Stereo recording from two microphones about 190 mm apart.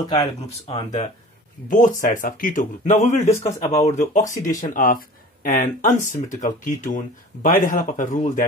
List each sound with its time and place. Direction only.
0.0 s speech: 20° left (ahead or behind)
1.7 s speech: 45° left (ahead or behind)
3.3 s speech: 15° left (ahead or behind)
3.8 s speech: 40° left (ahead or behind)